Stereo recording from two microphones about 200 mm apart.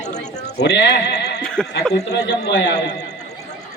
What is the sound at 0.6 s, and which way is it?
Speech, 60° left (ahead or behind).